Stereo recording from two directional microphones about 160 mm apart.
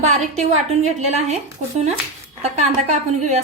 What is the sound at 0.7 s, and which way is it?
Speech, 45° right (ahead or behind).